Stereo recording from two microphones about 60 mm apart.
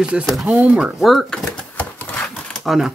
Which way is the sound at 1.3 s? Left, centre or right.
Centre.